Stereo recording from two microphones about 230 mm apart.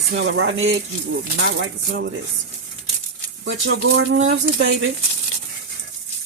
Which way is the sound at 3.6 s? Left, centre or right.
Right.